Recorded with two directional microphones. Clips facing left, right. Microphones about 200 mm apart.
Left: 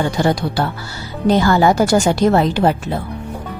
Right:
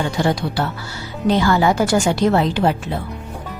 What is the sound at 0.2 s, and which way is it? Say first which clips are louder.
A woman's voice: even; 40° left (ahead or behind).